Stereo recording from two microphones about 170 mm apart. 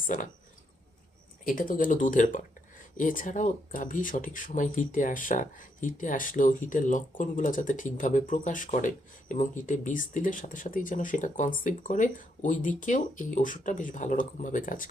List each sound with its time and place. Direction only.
1.5 s speech: 55° left (ahead or behind)